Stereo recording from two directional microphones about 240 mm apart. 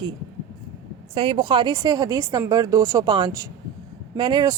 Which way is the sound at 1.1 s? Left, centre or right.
Right.